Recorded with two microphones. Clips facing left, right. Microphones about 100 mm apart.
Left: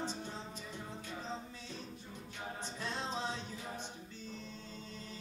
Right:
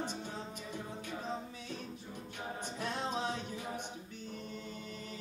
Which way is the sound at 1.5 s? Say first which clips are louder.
Right 4 dB; 60° right (ahead or behind).